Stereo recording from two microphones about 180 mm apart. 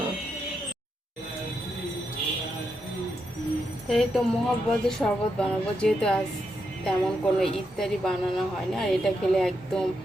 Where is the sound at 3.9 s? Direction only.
Centre (ahead or behind).